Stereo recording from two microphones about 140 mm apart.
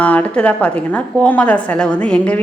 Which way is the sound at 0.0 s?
10° left (ahead or behind).